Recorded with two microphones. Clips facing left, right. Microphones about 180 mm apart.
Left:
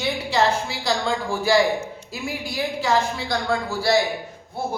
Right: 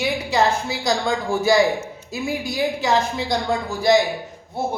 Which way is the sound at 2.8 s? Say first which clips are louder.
Right 2 dB; 20° right (ahead or behind).